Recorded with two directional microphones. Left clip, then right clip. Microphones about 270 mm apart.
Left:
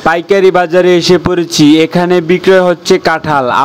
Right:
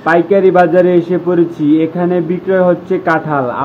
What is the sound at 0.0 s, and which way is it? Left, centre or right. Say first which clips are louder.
A man's voice: left 2 dB; left.